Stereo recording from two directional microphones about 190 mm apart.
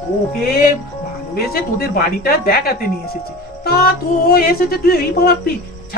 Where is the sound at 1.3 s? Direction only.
55° left (ahead or behind).